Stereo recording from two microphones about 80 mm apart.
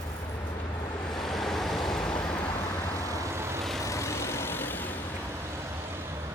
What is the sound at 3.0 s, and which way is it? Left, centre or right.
Vehicle, right.